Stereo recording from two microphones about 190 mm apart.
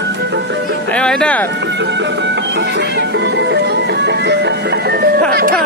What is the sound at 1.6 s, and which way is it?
Music, 65° right (ahead or behind).